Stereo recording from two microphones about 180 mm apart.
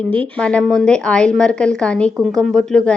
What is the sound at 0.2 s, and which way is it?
Speech, 5° left (ahead or behind).